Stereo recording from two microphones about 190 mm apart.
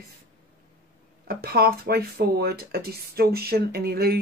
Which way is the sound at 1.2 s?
55° right (ahead or behind).